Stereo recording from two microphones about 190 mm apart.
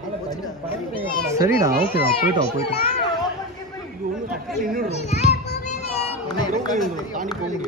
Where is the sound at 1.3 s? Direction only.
15° right (ahead or behind).